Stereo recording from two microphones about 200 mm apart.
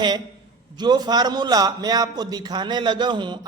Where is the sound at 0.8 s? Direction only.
20° right (ahead or behind).